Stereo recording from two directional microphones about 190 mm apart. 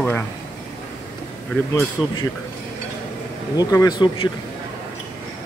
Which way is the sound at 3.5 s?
20° left (ahead or behind).